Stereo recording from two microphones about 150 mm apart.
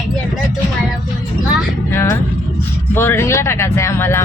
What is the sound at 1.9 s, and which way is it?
Speech, 15° left (ahead or behind).